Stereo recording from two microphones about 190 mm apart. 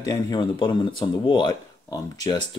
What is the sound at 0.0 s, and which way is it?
Speech, 20° left (ahead or behind).